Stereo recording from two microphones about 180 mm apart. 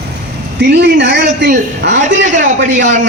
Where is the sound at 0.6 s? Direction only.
70° right (ahead or behind).